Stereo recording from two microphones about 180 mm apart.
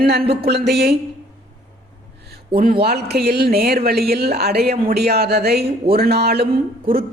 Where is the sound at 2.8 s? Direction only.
60° right (ahead or behind).